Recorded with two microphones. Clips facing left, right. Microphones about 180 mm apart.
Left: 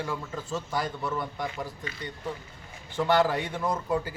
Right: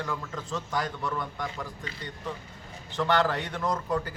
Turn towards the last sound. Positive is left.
turn(degrees=10)  # may be behind; listen again after turning